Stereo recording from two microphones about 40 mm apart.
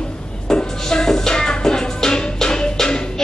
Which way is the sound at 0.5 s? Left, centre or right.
Centre.